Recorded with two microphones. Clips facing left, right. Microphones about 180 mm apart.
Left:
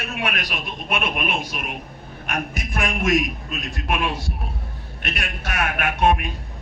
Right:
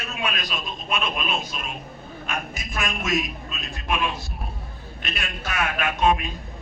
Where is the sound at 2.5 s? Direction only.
60° left (ahead or behind).